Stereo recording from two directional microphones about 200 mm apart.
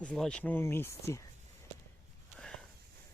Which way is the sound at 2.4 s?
5° left (ahead or behind).